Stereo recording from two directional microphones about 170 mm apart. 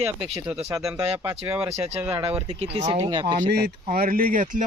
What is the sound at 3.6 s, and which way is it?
Speech, 55° right (ahead or behind).